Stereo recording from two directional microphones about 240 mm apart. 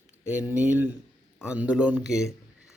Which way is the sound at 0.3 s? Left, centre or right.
Centre.